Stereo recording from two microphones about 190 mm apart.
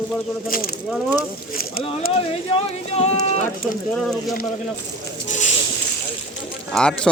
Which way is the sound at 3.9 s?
Centre (ahead or behind).